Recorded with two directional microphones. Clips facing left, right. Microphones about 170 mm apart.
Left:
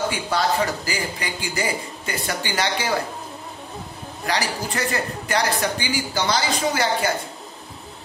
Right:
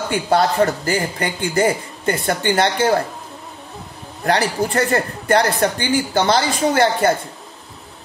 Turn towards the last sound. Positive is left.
turn(degrees=-55)  # may be behind; listen again after turning